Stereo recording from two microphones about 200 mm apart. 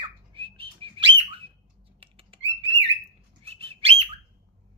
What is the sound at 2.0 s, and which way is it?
Bird, 30° right (ahead or behind).